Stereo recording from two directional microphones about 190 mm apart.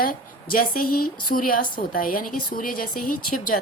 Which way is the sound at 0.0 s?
50° left (ahead or behind).